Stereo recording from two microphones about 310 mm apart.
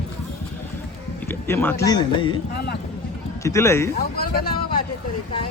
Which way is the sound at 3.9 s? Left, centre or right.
Left.